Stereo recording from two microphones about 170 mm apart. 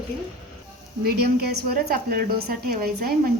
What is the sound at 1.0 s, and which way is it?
A woman's voice, 65° right (ahead or behind).